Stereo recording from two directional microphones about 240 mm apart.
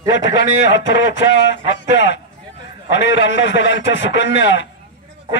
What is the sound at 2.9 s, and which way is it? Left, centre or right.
Speech, left.